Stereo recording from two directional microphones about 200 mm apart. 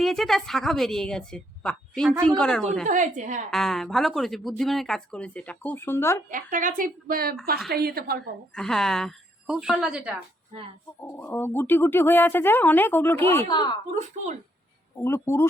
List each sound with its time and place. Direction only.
0.0 s speech: centre (ahead or behind)
2.8 s a woman's voice: 40° right (ahead or behind)
3.5 s speech: centre (ahead or behind)
6.3 s a woman's voice: 40° right (ahead or behind)
8.5 s speech: centre (ahead or behind)
11.0 s speech: 10° left (ahead or behind)
15.0 s speech: 10° left (ahead or behind)